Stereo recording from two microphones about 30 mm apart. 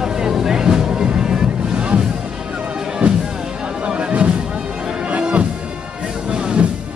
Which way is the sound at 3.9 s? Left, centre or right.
Right.